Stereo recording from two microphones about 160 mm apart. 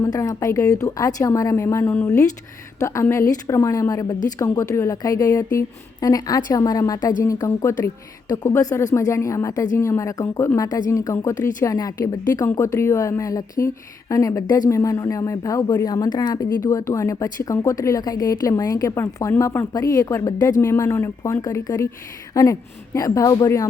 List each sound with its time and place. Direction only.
0.0 s speech: 20° left (ahead or behind)